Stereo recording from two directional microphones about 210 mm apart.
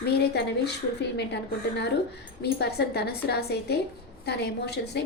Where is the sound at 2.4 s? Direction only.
50° left (ahead or behind).